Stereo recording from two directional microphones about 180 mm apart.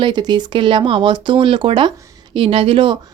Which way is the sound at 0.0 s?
25° right (ahead or behind).